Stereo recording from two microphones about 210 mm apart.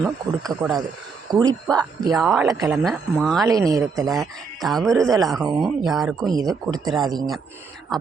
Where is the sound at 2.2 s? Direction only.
Centre (ahead or behind).